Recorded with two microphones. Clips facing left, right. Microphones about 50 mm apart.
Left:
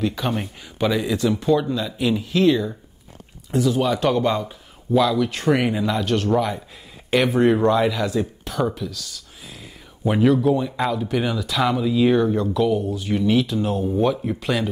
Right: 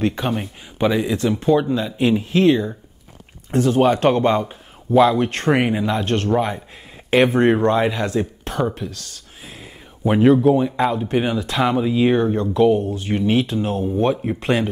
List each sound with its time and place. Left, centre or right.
0.0 s speech: right
0.7 s speech: right
1.1 s speech: right
5.6 s speech: right
6.0 s speech: right
10.0 s speech: right
12.8 s speech: right